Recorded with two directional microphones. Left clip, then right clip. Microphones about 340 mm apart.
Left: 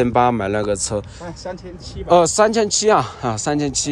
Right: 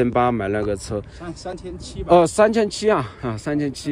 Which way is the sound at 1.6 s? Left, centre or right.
Right.